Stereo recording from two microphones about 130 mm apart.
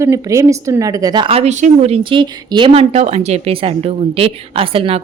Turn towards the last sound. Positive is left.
turn(degrees=-45)  # may be behind; listen again after turning